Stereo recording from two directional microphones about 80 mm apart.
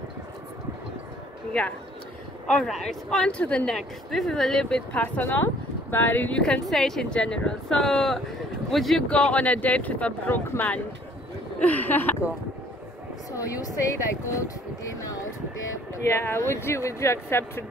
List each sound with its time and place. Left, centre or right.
2.5 s speech: centre
5.0 s a woman's voice: left
6.7 s speech: centre
9.1 s speech: centre
11.6 s speech: left
13.3 s speech: left
16.1 s speech: left